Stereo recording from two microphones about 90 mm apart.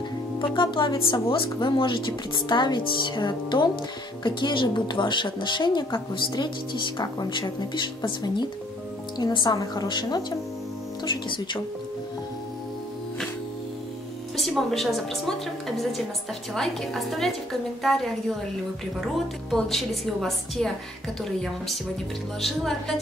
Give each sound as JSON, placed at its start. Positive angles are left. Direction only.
{"t": 0.4, "sound": "a woman's voice", "side_deg": 65}
{"t": 14.7, "sound": "a woman's voice", "side_deg": 0}
{"t": 16.5, "sound": "a woman's voice", "side_deg": 5}